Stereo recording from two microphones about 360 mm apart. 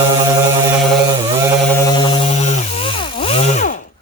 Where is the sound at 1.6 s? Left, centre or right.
Centre.